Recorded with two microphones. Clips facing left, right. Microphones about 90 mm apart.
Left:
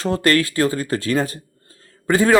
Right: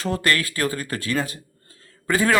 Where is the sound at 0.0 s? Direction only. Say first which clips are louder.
Left 5 dB; 35° left (ahead or behind).